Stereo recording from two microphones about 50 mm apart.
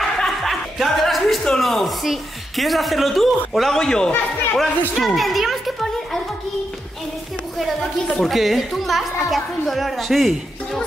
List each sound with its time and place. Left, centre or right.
0.2 s music: centre
1.6 s a woman's voice: centre
4.6 s speech: centre
7.5 s a woman's voice: centre